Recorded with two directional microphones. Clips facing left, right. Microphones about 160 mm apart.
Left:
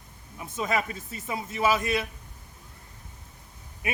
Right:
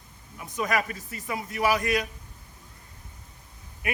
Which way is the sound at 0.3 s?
25° left (ahead or behind).